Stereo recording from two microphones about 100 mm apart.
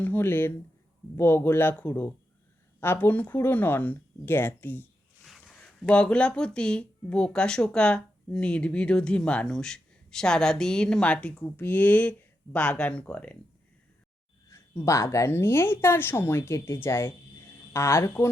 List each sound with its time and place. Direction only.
0.0 s a woman's voice: 20° left (ahead or behind)
5.5 s speech: 5° left (ahead or behind)
14.4 s a woman's voice: 30° left (ahead or behind)